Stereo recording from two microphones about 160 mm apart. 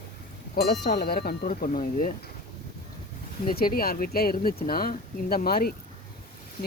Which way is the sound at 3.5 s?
65° left (ahead or behind).